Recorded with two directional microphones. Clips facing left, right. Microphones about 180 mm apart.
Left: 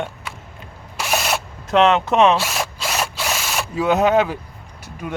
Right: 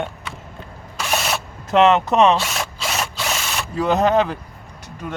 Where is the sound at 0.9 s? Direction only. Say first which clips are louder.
Left 1 dB; centre (ahead or behind).